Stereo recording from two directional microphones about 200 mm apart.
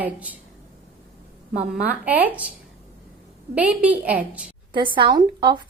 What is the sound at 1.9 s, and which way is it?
Speech, 10° right (ahead or behind).